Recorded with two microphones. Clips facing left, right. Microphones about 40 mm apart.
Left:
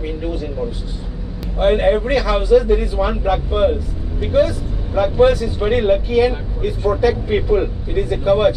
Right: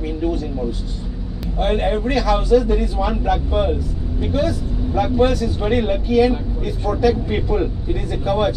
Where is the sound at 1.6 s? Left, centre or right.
Centre.